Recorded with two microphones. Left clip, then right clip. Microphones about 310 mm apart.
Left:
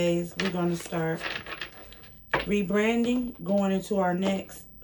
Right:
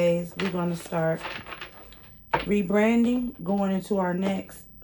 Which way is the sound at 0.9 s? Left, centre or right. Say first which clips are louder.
Right 7 dB; centre.